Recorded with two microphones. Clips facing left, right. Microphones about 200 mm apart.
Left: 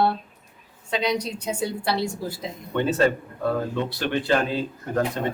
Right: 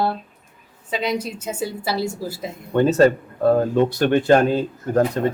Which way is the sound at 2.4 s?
45° right (ahead or behind).